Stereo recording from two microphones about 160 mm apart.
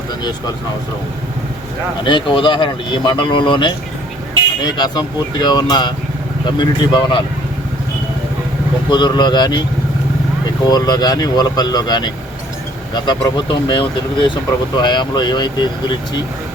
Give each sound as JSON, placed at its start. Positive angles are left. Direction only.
{"t": 0.2, "sound": "speech", "side_deg": 25}
{"t": 2.0, "sound": "speech", "side_deg": 30}
{"t": 8.9, "sound": "speech", "side_deg": 30}
{"t": 10.7, "sound": "speech", "side_deg": 25}